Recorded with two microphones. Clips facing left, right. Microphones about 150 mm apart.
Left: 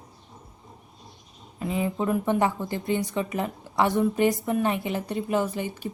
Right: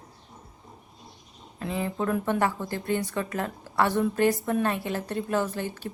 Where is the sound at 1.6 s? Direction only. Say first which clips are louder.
Left 2 dB; 10° left (ahead or behind).